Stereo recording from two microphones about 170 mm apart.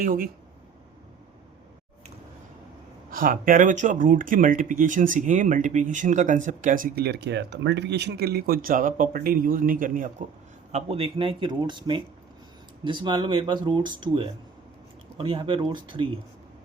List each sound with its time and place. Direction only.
0.0 s speech: 55° right (ahead or behind)
3.1 s speech: 55° right (ahead or behind)
10.7 s speech: 40° right (ahead or behind)